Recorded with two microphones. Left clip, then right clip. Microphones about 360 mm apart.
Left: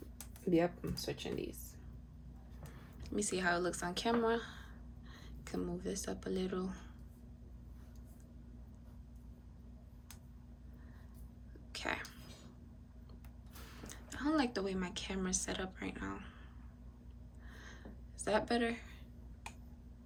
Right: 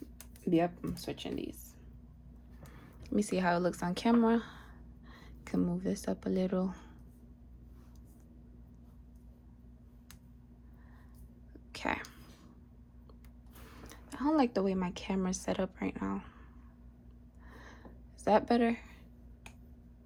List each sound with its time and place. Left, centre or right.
0.5 s speech: centre
2.7 s speech: centre
11.7 s a sound: centre
13.7 s speech: centre
17.5 s a sound: centre
18.2 s a woman's voice: centre